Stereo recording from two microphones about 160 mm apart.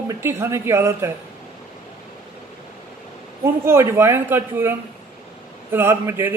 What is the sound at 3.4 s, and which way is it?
Speech, 15° right (ahead or behind).